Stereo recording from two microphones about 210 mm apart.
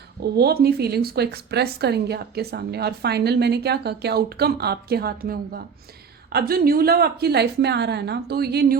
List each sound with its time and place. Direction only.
0.2 s speech: 45° right (ahead or behind)